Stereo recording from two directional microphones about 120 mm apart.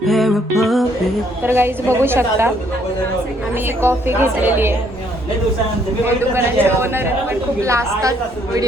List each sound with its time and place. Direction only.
0.0 s music: centre (ahead or behind)
1.5 s a woman's voice: 20° right (ahead or behind)
3.8 s a woman's voice: 20° right (ahead or behind)
6.1 s a woman's voice: 20° right (ahead or behind)